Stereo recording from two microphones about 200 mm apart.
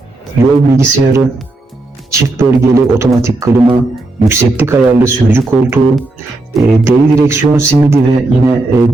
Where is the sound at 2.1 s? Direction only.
15° right (ahead or behind).